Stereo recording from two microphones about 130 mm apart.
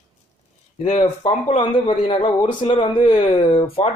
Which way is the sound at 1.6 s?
40° left (ahead or behind).